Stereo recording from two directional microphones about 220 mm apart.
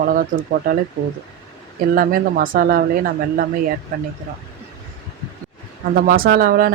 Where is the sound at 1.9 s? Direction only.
40° right (ahead or behind).